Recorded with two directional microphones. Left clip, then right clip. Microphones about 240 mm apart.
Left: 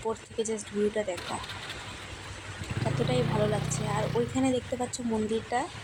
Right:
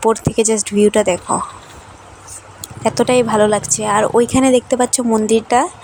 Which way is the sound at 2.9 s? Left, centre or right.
Right.